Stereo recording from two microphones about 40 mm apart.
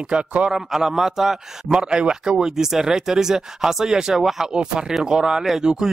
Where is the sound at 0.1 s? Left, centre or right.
Right.